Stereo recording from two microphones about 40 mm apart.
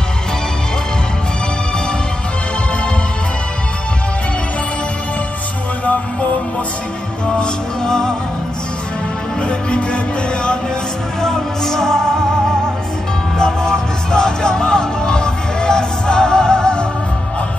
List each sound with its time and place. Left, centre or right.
7.8 s music: centre
9.4 s music: left
11.1 s music: centre
13.4 s music: centre